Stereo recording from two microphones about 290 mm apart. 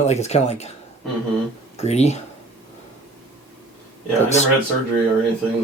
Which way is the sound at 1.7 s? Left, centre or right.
Left.